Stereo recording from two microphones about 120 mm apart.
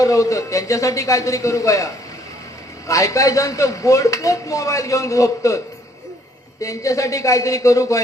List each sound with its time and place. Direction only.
0.0 s a man's voice: 25° left (ahead or behind)